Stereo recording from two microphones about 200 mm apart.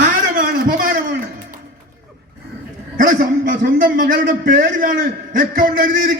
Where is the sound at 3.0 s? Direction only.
45° right (ahead or behind).